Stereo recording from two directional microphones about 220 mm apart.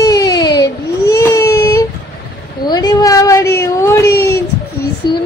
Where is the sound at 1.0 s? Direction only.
15° left (ahead or behind).